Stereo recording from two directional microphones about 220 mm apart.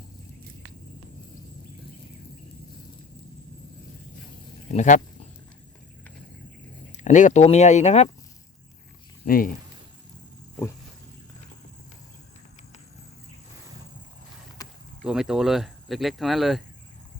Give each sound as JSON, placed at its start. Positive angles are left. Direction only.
{"t": 4.7, "sound": "speech", "side_deg": 35}
{"t": 6.9, "sound": "speech", "side_deg": 35}
{"t": 9.2, "sound": "speech", "side_deg": 40}
{"t": 14.6, "sound": "a sound", "side_deg": 15}
{"t": 15.0, "sound": "speech", "side_deg": -5}